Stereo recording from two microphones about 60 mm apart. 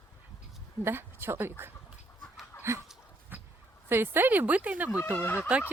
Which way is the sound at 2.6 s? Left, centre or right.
Right.